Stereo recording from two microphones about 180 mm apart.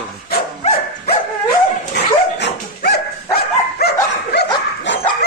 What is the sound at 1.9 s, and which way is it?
Dog, 65° left (ahead or behind).